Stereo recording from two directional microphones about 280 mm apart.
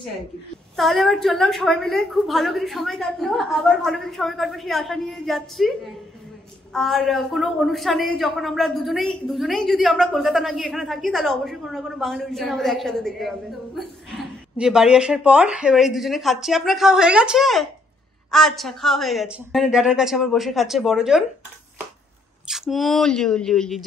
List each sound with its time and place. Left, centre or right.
0.7 s a woman's voice: centre
22.5 s a woman's voice: centre